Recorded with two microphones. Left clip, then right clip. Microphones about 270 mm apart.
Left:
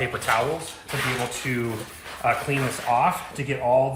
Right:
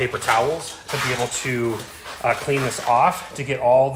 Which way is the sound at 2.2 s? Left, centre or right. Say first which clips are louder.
Right 2 dB; right.